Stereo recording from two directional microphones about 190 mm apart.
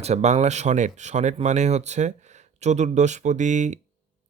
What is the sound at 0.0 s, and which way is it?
Speech, 35° right (ahead or behind).